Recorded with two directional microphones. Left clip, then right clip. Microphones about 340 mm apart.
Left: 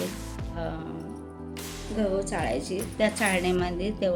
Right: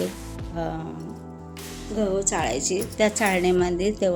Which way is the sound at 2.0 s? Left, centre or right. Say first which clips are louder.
Right 4 dB; right.